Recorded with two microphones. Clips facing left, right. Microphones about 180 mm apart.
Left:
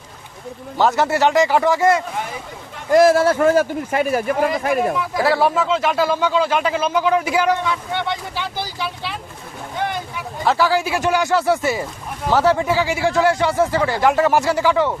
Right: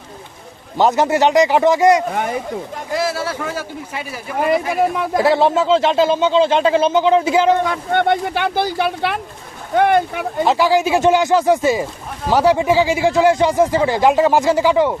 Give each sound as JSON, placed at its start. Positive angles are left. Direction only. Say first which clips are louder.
{"t": 0.8, "sound": "speech", "louder": "right 2 dB", "side_deg": -20}
{"t": 2.1, "sound": "speech", "louder": "right 6 dB", "side_deg": -60}
{"t": 2.9, "sound": "speech", "louder": "left 9 dB", "side_deg": 50}
{"t": 5.1, "sound": "speech", "louder": "right 3 dB", "side_deg": -20}
{"t": 7.6, "sound": "speech", "louder": "right 6 dB", "side_deg": -50}
{"t": 10.4, "sound": "speech", "louder": "right 3 dB", "side_deg": -20}